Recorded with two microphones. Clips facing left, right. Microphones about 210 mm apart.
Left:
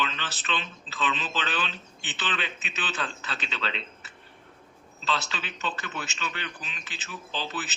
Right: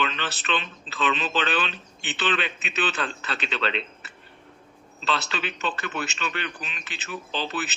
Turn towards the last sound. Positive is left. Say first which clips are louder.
# right 4 dB
turn(degrees=-65)  # may be behind; listen again after turning